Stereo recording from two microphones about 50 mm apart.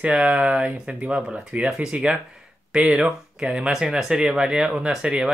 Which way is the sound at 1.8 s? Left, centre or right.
Centre.